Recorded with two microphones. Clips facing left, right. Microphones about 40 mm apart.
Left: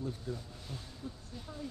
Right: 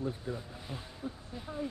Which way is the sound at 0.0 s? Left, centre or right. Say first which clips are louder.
Right 3 dB; right.